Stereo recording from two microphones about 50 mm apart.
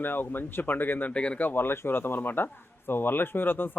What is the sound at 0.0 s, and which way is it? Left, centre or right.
Speech, left.